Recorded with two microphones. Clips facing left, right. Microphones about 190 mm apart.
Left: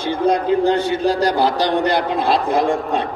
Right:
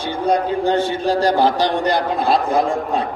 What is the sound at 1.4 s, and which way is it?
A man's voice, 35° left (ahead or behind).